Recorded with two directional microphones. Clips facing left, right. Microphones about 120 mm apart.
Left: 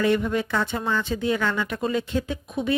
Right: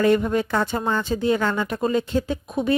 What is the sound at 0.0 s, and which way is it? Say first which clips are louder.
Speech: right 3 dB; 40° right (ahead or behind).